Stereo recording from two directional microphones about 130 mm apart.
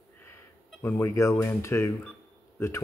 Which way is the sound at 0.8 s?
20° left (ahead or behind).